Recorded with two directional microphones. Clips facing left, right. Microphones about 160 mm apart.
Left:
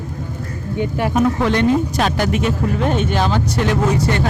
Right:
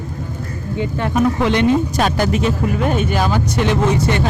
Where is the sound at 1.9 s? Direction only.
40° right (ahead or behind).